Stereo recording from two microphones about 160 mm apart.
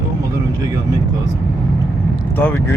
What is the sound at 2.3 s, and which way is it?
Speech, 10° left (ahead or behind).